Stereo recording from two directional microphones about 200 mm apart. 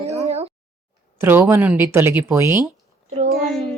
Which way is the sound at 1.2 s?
10° right (ahead or behind).